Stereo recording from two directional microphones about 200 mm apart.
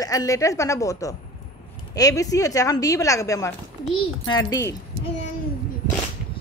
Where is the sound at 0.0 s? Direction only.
15° left (ahead or behind).